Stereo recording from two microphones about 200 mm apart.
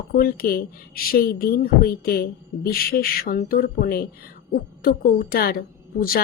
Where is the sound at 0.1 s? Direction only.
50° left (ahead or behind).